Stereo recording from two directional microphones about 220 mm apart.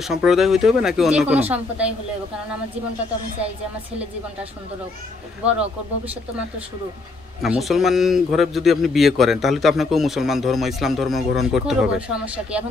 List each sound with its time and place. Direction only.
0.0 s a man's voice: centre (ahead or behind)
7.4 s a man's voice: centre (ahead or behind)